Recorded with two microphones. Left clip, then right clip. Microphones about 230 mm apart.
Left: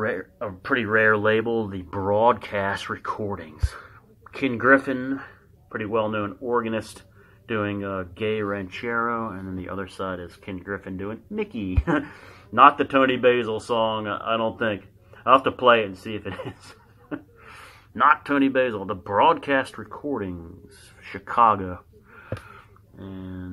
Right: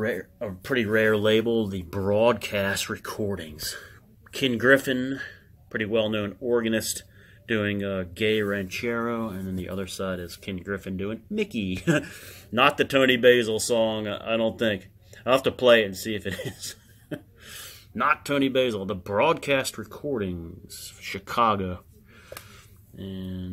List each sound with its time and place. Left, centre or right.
0.0 s speech: right